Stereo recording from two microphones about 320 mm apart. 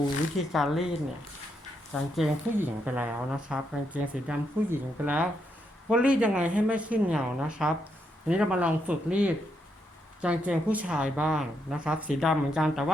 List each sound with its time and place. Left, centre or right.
0.5 s speech: centre
1.9 s speech: centre